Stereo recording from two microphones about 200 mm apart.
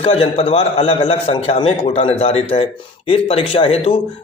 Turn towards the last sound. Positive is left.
turn(degrees=30)  # may be behind; listen again after turning